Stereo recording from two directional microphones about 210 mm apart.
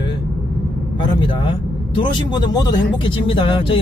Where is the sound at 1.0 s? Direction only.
25° left (ahead or behind).